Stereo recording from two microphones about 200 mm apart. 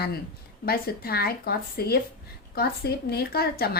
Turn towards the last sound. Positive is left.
turn(degrees=50)  # may be behind; listen again after turning